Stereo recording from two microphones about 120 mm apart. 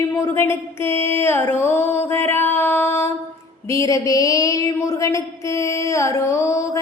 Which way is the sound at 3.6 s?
25° left (ahead or behind).